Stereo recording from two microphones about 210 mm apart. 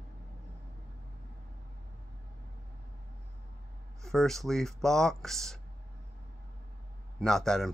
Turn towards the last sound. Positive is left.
turn(degrees=0)  # may be behind; listen again after turning